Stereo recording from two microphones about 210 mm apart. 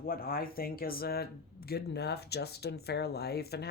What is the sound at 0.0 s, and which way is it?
Speech, 45° left (ahead or behind).